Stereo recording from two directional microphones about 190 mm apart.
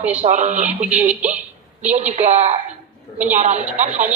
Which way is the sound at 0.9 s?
10° right (ahead or behind).